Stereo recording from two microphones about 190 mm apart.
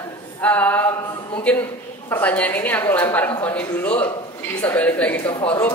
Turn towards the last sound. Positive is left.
turn(degrees=10)  # may be behind; listen again after turning